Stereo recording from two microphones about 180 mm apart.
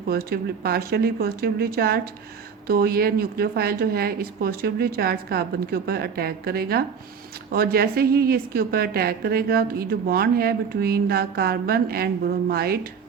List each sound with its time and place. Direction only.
0.1 s a woman's voice: 60° right (ahead or behind)